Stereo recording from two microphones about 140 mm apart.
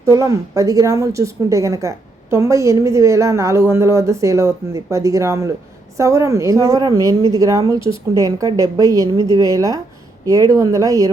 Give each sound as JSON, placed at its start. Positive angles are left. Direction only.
{"t": 0.0, "sound": "a woman's voice", "side_deg": -25}
{"t": 9.1, "sound": "a woman's voice", "side_deg": 30}
{"t": 9.4, "sound": "a woman's voice", "side_deg": -25}